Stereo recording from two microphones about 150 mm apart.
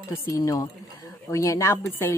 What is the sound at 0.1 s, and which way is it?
A woman's voice, 20° left (ahead or behind).